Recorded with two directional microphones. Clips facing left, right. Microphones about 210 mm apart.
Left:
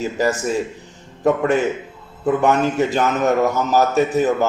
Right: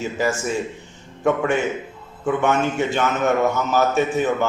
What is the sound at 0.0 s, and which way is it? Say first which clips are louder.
A man's voice: left 3 dB; 35° left (ahead or behind).